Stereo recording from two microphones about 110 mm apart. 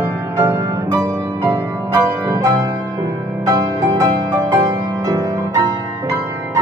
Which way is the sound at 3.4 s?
35° right (ahead or behind).